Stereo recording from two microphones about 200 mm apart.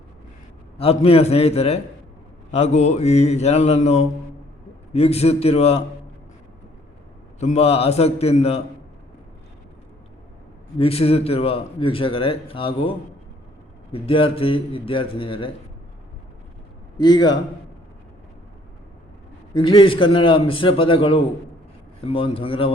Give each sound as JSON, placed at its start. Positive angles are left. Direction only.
{"t": 0.8, "sound": "speech", "side_deg": 30}
{"t": 7.3, "sound": "speech", "side_deg": 35}
{"t": 10.8, "sound": "speech", "side_deg": 30}
{"t": 13.9, "sound": "speech", "side_deg": 30}
{"t": 17.0, "sound": "speech", "side_deg": 20}
{"t": 19.5, "sound": "speech", "side_deg": 25}